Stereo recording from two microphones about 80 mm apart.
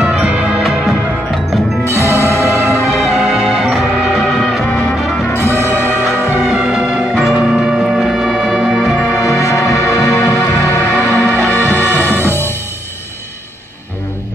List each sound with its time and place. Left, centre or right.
0.6 s music: centre
1.9 s music: left
2.4 s music: right
2.9 s music: centre
5.3 s music: left
6.5 s music: centre
9.1 s music: left
11.0 s music: left